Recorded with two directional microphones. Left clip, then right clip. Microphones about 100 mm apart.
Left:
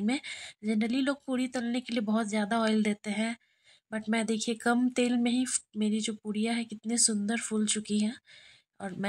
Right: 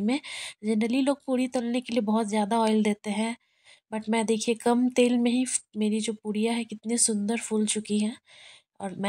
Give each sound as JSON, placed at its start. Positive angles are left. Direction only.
{"t": 0.0, "sound": "speech", "side_deg": -20}